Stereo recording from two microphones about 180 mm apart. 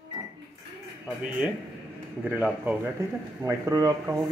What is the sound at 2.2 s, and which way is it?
Speech, 10° right (ahead or behind).